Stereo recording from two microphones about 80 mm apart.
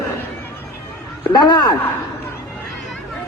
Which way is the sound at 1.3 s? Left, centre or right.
Left.